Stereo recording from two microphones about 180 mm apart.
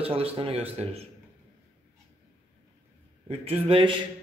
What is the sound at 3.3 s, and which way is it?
Speech, 35° right (ahead or behind).